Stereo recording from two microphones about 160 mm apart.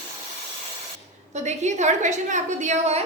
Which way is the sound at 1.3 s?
45° right (ahead or behind).